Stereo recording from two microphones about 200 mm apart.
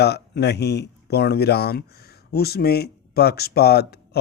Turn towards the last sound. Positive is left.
turn(degrees=55)  # may be behind; listen again after turning